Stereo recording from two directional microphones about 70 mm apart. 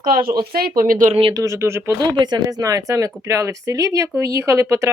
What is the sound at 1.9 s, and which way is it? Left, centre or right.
Speech, right.